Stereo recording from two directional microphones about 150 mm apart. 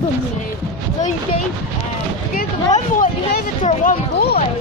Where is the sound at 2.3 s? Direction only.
65° left (ahead or behind).